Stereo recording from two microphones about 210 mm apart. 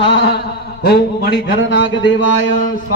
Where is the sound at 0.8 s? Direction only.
45° left (ahead or behind).